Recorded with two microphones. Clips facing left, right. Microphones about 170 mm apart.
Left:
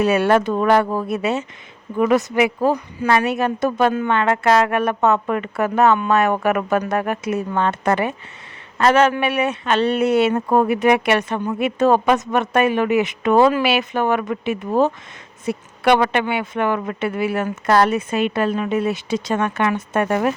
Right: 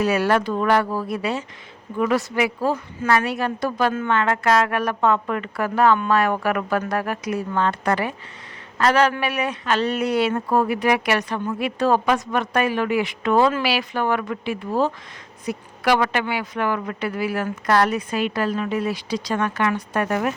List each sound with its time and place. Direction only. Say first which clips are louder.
0.0 s speech: left 4 dB; 25° left (ahead or behind)